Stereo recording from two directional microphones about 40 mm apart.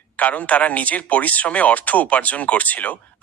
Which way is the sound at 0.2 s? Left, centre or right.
Left.